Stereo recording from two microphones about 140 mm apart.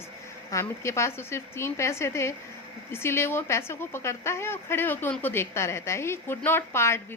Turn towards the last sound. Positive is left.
turn(degrees=20)  # may be behind; listen again after turning